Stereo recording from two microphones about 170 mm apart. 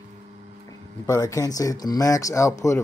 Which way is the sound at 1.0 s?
20° left (ahead or behind).